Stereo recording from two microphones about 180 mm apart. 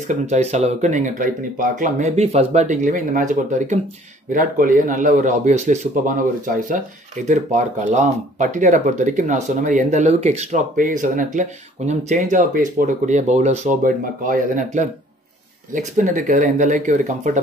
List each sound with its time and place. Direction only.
0.1 s speech: 40° right (ahead or behind)